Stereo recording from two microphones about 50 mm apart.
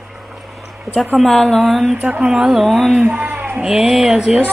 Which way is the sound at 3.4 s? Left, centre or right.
Right.